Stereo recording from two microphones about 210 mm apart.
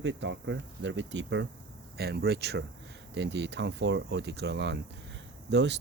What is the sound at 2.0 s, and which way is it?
Speech, 50° right (ahead or behind).